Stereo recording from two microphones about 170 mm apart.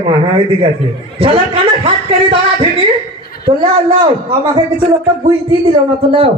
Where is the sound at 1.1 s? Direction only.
35° right (ahead or behind).